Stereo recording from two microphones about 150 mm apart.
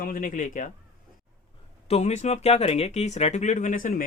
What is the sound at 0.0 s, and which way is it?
Speech, 70° left (ahead or behind).